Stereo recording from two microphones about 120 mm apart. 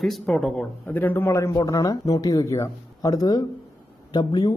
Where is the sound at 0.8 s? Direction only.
15° left (ahead or behind).